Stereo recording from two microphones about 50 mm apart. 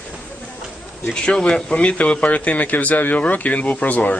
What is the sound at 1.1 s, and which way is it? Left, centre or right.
Speech, centre.